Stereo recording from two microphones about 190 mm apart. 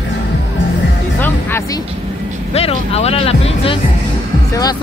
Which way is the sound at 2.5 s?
30° left (ahead or behind).